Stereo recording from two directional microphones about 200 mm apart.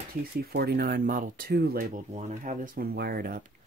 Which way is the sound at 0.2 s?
50° right (ahead or behind).